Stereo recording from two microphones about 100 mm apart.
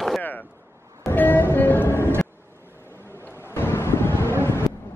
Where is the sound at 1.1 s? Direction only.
20° left (ahead or behind).